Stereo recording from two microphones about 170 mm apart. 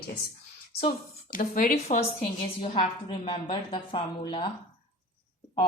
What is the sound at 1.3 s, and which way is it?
Speech, 55° left (ahead or behind).